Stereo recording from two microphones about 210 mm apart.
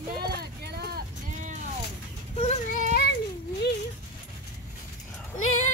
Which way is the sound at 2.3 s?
30° left (ahead or behind).